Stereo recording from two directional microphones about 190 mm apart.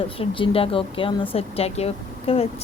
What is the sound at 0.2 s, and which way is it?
Speech, 30° left (ahead or behind).